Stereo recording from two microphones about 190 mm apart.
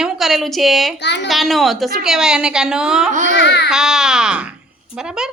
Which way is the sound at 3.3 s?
65° left (ahead or behind).